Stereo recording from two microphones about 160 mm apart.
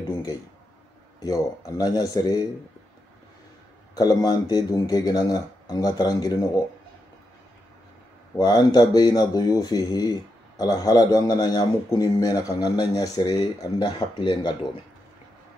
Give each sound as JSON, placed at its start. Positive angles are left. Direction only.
{"t": 1.2, "sound": "a man's voice", "side_deg": 25}
{"t": 3.9, "sound": "a man's voice", "side_deg": 25}
{"t": 8.4, "sound": "a man's voice", "side_deg": 25}